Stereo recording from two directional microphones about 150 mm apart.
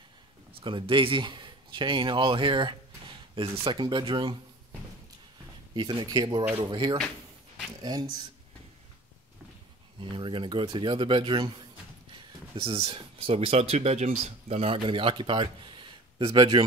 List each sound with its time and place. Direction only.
0.5 s speech: 35° right (ahead or behind)
5.8 s speech: 30° right (ahead or behind)
9.9 s speech: 35° right (ahead or behind)